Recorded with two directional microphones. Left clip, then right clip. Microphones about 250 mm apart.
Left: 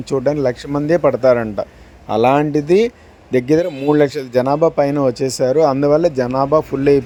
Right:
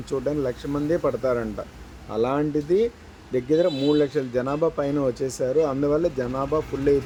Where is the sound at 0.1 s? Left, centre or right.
Left.